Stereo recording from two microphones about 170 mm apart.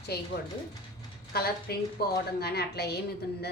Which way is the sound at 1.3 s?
65° left (ahead or behind).